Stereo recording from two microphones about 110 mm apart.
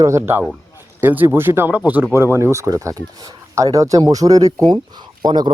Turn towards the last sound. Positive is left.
turn(degrees=-40)  # may be behind; listen again after turning